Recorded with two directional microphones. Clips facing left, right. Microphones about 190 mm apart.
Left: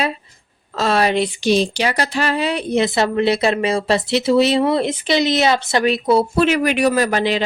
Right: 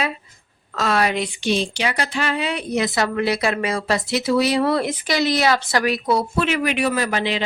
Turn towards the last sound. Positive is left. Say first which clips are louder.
# left 5 dB
turn(degrees=40)  # may be behind; listen again after turning